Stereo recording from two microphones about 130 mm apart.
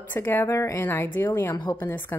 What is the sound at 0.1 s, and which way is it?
A woman's voice, 15° left (ahead or behind).